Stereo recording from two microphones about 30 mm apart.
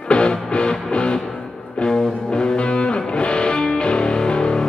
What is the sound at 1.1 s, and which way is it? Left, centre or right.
Music, centre.